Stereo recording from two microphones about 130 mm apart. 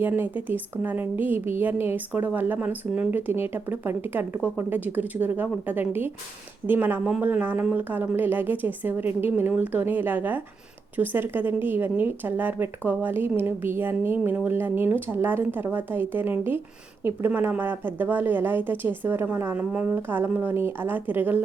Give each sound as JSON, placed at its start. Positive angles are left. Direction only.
{"t": 0.0, "sound": "speech", "side_deg": -15}